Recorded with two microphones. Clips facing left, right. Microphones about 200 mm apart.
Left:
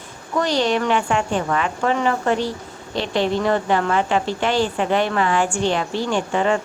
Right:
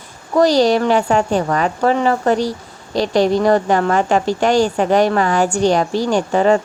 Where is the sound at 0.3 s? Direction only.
35° right (ahead or behind).